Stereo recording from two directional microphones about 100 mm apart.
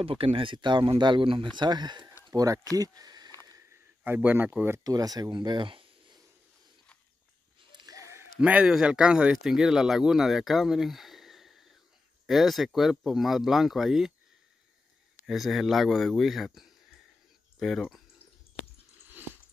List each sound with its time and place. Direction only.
0.0 s speech: 65° right (ahead or behind); by 2.0 s 45° right (ahead or behind)
2.3 s speech: 35° right (ahead or behind)
4.0 s speech: 20° right (ahead or behind)
4.8 s speech: 40° right (ahead or behind); by 6.2 s 55° right (ahead or behind)
7.7 s a sound: 40° right (ahead or behind)
8.4 s speech: 10° right (ahead or behind)
15.2 s speech: centre (ahead or behind)